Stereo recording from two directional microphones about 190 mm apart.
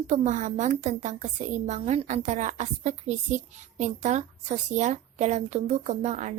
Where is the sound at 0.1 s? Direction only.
40° right (ahead or behind).